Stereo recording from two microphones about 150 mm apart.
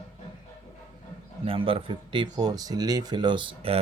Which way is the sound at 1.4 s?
35° right (ahead or behind).